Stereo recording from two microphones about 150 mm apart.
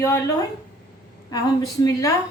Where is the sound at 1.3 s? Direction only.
25° left (ahead or behind).